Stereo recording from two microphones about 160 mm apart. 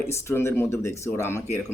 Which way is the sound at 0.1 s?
15° left (ahead or behind).